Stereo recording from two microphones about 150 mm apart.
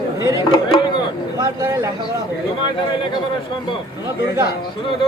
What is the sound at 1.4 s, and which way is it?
Speech, 25° right (ahead or behind).